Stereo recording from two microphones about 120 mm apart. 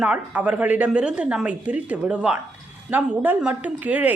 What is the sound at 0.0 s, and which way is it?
A woman's voice, 10° right (ahead or behind).